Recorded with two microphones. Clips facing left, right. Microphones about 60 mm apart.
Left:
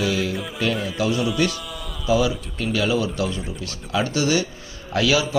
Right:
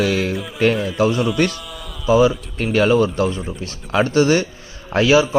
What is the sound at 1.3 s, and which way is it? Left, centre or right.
Speech, right.